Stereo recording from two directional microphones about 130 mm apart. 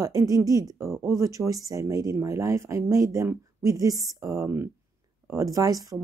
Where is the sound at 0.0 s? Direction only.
25° right (ahead or behind).